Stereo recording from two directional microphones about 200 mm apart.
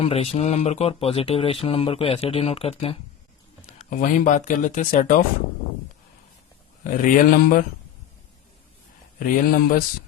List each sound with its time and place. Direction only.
0.0 s speech: 30° left (ahead or behind)
3.7 s speech: 40° left (ahead or behind)
7.0 s speech: 45° left (ahead or behind)
9.1 s speech: 45° left (ahead or behind)